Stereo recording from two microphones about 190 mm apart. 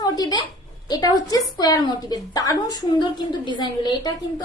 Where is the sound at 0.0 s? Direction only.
20° left (ahead or behind).